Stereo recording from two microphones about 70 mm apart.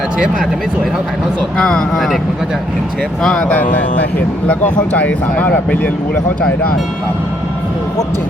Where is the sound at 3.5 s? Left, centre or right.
Left.